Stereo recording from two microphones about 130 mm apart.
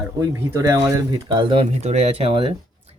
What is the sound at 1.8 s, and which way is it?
Speech, 55° right (ahead or behind).